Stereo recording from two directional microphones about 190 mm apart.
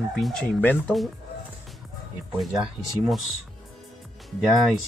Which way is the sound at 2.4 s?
Centre (ahead or behind).